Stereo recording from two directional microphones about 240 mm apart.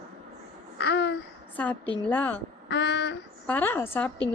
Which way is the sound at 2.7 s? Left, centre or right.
Left.